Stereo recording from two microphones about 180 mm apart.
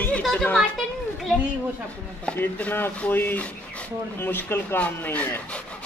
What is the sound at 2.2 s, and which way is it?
Speech, 10° left (ahead or behind).